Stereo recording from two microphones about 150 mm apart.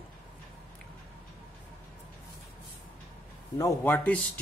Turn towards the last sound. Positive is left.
turn(degrees=10)  # may be behind; listen again after turning